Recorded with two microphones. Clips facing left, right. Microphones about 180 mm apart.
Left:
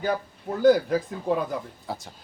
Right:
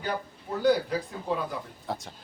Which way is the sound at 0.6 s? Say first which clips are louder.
Left 5 dB; 50° left (ahead or behind).